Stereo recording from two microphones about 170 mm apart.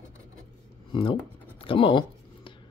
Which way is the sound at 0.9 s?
30° left (ahead or behind).